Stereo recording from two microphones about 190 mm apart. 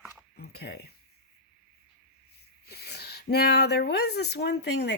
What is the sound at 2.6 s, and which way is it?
Speech, 60° left (ahead or behind).